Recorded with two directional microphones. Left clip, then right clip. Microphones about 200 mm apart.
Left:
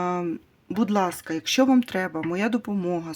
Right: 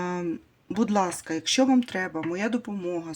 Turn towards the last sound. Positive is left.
turn(degrees=35)  # may be behind; listen again after turning